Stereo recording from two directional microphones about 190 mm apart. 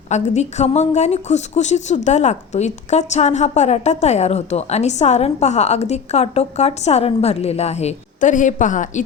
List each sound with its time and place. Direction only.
0.1 s a woman's voice: 35° left (ahead or behind)